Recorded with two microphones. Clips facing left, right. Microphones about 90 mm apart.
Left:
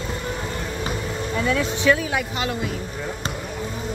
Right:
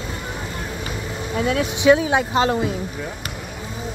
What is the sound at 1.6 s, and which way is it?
Speech, 15° right (ahead or behind).